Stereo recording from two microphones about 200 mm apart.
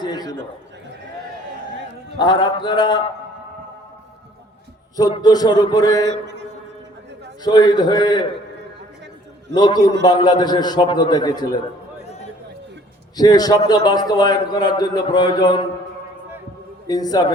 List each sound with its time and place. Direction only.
0.0 s a sound: 20° left (ahead or behind)
2.1 s a man's voice: 20° left (ahead or behind)
4.9 s a man's voice: 20° left (ahead or behind)
7.4 s a man's voice: 20° left (ahead or behind)
9.6 s a man's voice: 20° left (ahead or behind)
13.1 s a man's voice: 20° left (ahead or behind)
16.8 s a man's voice: 20° left (ahead or behind)